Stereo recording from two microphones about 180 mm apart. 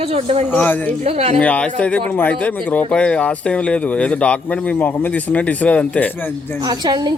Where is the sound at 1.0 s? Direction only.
35° right (ahead or behind).